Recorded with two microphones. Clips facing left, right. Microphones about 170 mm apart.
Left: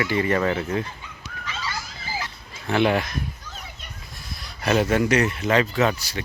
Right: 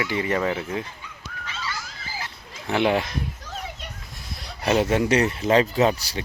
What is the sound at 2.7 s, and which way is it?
Speech, 20° right (ahead or behind).